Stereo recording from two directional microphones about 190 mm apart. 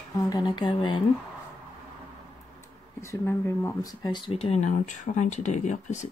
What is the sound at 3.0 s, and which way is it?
Speech, 15° left (ahead or behind).